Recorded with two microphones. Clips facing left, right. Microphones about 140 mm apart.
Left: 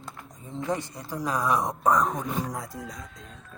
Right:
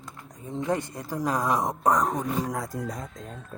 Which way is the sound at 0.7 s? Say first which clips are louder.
Right 2 dB; 50° right (ahead or behind).